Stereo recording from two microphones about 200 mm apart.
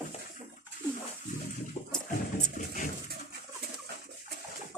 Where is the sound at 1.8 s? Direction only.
35° left (ahead or behind).